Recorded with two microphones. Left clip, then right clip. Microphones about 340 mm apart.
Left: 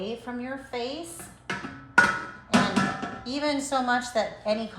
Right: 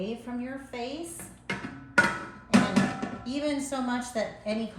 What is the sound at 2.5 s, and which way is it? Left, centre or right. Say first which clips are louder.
A woman's voice: left 2 dB; centre.